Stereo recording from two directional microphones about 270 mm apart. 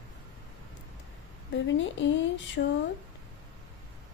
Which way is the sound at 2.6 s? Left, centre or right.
Left.